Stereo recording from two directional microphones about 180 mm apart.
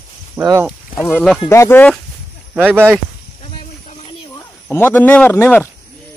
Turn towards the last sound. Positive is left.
turn(degrees=10)  # may be behind; listen again after turning